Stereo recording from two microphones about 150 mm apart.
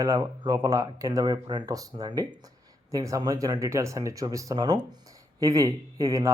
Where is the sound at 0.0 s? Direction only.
25° right (ahead or behind).